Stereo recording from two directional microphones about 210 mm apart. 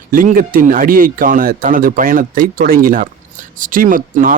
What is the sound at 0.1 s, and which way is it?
Speech, 40° right (ahead or behind).